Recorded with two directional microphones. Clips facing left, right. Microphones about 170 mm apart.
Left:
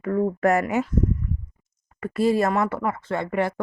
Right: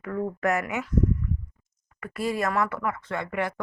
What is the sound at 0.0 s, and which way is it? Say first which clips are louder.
Speech: left 6 dB; 30° left (ahead or behind).